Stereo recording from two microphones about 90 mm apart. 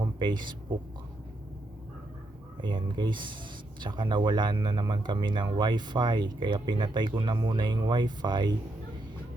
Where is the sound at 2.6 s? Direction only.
60° right (ahead or behind).